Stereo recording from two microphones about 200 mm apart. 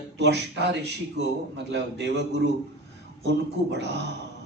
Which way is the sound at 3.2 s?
60° right (ahead or behind).